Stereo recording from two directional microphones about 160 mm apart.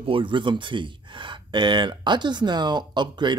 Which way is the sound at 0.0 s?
30° right (ahead or behind).